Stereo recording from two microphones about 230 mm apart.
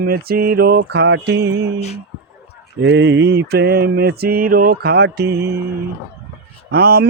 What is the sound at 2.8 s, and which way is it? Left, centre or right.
Speech, right.